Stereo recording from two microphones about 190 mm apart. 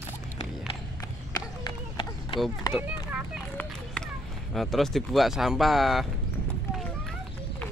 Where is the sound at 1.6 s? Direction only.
25° left (ahead or behind).